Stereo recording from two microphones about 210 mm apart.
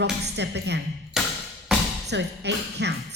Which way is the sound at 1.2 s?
Centre (ahead or behind).